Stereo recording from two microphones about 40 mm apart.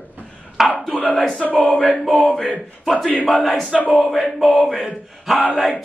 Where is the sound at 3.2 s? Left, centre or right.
Centre.